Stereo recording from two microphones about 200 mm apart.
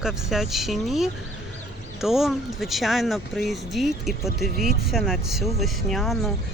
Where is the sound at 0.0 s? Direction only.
Centre (ahead or behind).